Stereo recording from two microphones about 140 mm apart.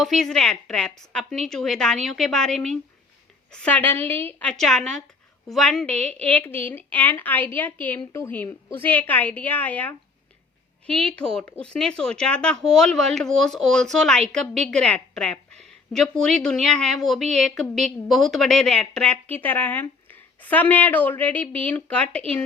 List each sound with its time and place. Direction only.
0.0 s a woman's voice: 5° left (ahead or behind)